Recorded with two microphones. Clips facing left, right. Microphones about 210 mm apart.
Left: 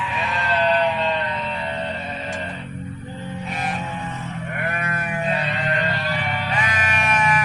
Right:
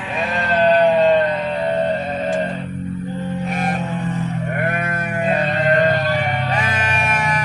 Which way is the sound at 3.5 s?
50° right (ahead or behind).